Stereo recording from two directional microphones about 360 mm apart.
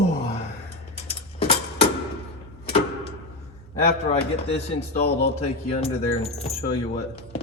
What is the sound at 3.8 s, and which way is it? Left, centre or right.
Speech, left.